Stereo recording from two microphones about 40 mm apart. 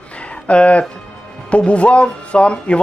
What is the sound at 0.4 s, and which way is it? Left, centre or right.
A man's voice, left.